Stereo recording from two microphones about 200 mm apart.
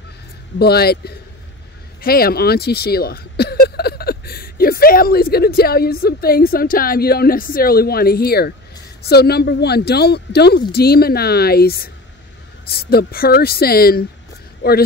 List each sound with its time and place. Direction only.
0.6 s speech: 50° left (ahead or behind)